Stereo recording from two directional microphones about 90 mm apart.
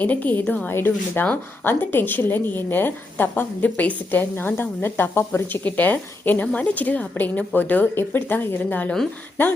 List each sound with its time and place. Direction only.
0.0 s a woman's voice: 20° left (ahead or behind)
5.6 s a woman's voice: 15° left (ahead or behind)